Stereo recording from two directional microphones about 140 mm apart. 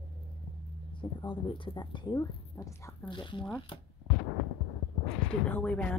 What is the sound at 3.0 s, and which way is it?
Speech, 35° left (ahead or behind).